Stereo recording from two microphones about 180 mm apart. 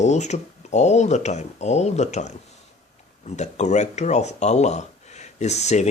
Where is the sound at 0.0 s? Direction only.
40° left (ahead or behind).